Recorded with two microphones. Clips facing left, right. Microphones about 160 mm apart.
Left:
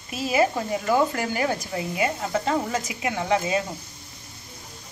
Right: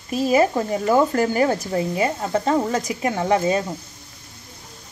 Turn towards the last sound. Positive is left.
turn(degrees=-40)  # may be behind; listen again after turning